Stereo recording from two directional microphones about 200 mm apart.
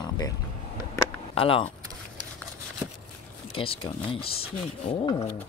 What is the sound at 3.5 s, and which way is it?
Speech, 25° left (ahead or behind).